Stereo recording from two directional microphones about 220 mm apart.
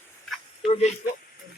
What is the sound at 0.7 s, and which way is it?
Speech, 30° left (ahead or behind).